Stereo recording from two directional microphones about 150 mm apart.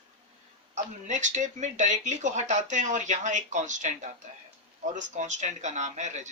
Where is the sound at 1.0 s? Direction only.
55° right (ahead or behind).